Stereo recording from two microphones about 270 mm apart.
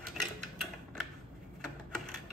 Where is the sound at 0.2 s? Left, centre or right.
Centre.